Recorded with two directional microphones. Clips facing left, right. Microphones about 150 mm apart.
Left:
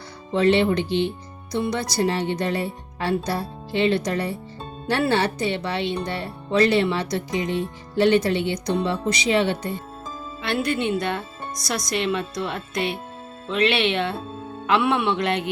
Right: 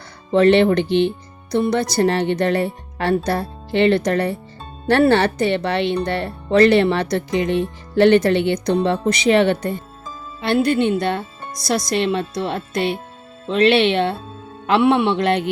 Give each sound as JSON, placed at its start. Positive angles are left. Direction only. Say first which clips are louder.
{"t": 0.3, "sound": "speech", "louder": "right 5 dB", "side_deg": -60}
{"t": 10.4, "sound": "speech", "louder": "right 7 dB", "side_deg": -35}